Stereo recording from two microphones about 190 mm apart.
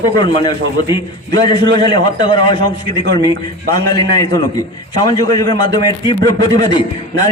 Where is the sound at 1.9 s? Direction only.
25° left (ahead or behind).